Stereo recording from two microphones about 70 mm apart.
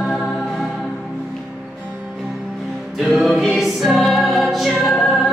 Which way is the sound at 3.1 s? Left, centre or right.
Centre.